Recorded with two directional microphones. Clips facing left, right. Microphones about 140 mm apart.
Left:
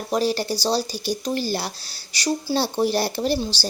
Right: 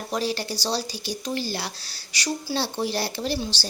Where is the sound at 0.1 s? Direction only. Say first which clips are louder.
Left 6 dB; 40° left (ahead or behind).